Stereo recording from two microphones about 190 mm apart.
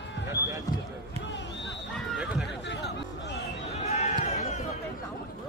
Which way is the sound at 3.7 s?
35° left (ahead or behind).